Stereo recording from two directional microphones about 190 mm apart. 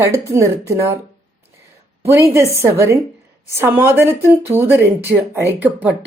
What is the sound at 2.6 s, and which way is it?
Speech, 15° right (ahead or behind).